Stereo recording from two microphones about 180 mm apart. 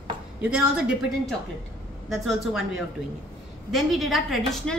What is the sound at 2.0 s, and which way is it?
A woman's voice, centre (ahead or behind).